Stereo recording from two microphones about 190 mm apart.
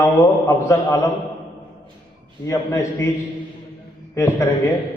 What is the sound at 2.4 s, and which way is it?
Speech, 15° left (ahead or behind).